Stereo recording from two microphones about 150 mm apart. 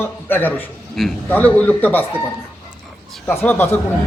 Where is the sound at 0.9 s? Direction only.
Centre (ahead or behind).